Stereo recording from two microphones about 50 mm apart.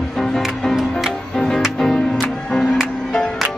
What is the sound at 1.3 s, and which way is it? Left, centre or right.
Music, centre.